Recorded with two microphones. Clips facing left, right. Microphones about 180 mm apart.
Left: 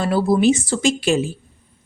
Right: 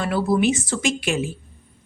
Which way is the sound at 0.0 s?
35° left (ahead or behind).